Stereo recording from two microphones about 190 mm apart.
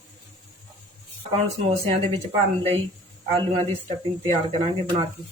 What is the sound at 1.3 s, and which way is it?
Speech, 30° right (ahead or behind).